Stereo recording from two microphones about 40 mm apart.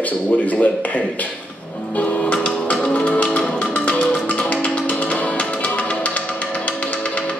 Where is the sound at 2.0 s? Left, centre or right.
Left.